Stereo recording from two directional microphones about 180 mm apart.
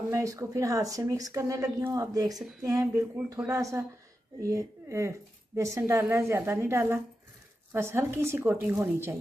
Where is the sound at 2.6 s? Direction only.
15° right (ahead or behind).